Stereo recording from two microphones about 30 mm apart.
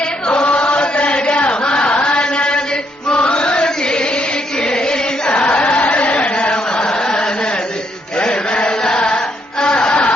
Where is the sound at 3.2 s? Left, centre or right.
Left.